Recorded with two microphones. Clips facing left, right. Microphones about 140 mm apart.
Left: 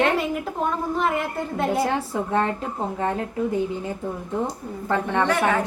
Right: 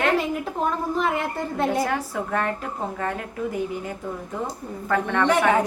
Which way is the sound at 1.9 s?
25° left (ahead or behind).